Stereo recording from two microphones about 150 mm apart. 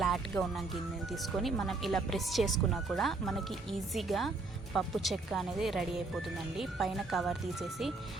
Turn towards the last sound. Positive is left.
turn(degrees=0)  # may be behind; listen again after turning